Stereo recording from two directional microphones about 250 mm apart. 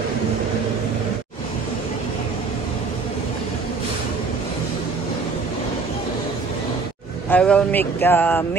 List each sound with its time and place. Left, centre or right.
7.2 s speech: centre